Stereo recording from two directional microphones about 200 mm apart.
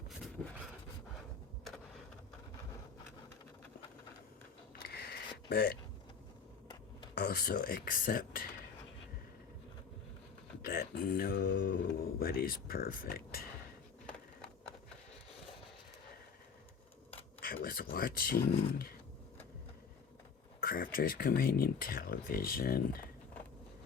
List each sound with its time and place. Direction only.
4.8 s a sound: 50° left (ahead or behind)
7.2 s speech: 50° left (ahead or behind)
10.6 s speech: 45° left (ahead or behind)
17.4 s speech: 45° left (ahead or behind)
20.6 s speech: 45° left (ahead or behind)